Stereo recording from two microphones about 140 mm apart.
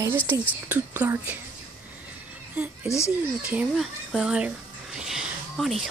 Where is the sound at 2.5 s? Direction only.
10° right (ahead or behind).